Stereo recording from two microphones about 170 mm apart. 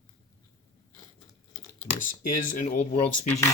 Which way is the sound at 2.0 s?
50° left (ahead or behind).